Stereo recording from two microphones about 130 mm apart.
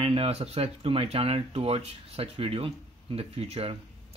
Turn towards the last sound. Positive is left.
turn(degrees=-50)  # may be behind; listen again after turning